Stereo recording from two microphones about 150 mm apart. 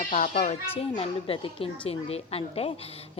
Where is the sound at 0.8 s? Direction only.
40° left (ahead or behind).